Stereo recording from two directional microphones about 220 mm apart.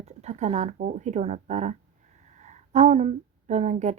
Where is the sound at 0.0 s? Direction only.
30° right (ahead or behind).